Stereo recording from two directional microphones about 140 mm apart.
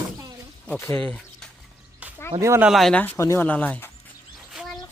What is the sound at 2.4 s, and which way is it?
Speech, 20° right (ahead or behind).